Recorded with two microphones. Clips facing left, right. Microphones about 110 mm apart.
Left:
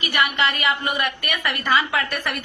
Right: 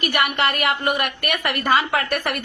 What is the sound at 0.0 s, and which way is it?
A woman's voice, 50° right (ahead or behind).